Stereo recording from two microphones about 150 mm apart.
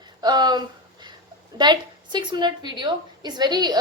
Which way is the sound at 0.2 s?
30° right (ahead or behind).